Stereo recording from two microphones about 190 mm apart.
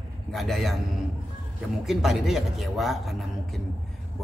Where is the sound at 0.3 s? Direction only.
Centre (ahead or behind).